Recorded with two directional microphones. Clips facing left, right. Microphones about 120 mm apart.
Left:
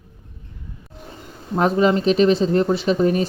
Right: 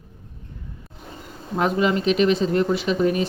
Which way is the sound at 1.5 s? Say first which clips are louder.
Left 4 dB; 35° left (ahead or behind).